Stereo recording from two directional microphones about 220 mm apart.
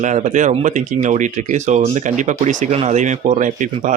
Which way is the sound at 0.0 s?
35° right (ahead or behind).